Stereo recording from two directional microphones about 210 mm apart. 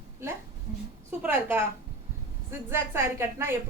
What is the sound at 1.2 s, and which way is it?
A woman's voice, 10° right (ahead or behind).